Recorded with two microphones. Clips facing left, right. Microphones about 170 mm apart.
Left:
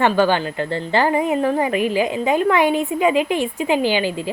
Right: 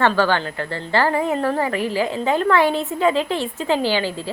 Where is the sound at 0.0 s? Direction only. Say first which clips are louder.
Left 2 dB; 15° left (ahead or behind).